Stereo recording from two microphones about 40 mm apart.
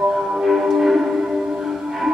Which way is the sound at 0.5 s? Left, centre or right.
Centre.